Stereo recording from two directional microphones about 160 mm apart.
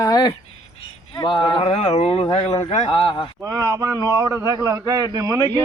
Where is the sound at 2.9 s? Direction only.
30° left (ahead or behind).